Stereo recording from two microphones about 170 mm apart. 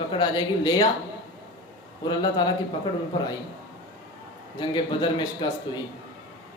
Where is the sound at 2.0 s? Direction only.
25° left (ahead or behind).